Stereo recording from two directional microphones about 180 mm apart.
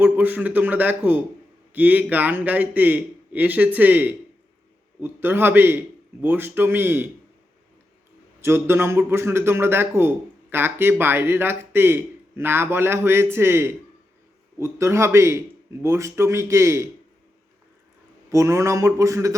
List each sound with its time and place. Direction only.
0.0 s a man's voice: 10° right (ahead or behind)
8.4 s a man's voice: 15° right (ahead or behind)
18.3 s a man's voice: 15° right (ahead or behind)